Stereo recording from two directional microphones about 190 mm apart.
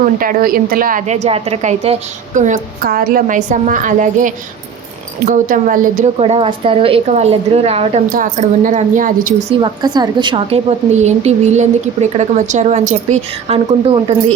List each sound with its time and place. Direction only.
0.0 s a woman's voice: 45° right (ahead or behind)
6.1 s a woman's voice: 30° right (ahead or behind)
8.1 s a woman's voice: 45° right (ahead or behind)
9.6 s a woman's voice: 25° right (ahead or behind)